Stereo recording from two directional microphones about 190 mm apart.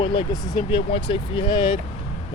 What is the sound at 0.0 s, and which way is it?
Speech, 25° left (ahead or behind).